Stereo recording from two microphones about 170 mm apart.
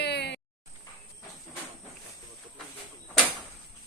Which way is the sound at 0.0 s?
85° left.